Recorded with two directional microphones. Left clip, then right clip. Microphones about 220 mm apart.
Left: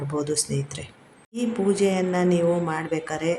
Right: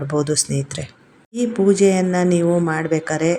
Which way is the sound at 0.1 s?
20° right (ahead or behind).